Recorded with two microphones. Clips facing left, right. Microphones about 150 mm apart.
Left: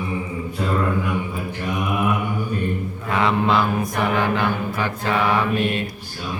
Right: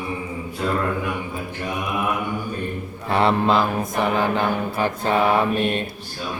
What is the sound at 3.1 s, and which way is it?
Mantra, 30° right (ahead or behind).